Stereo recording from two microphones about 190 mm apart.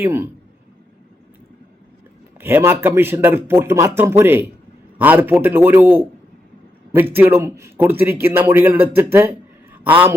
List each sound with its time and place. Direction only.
0.0 s a man's voice: 10° right (ahead or behind)
2.4 s a man's voice: 10° right (ahead or behind)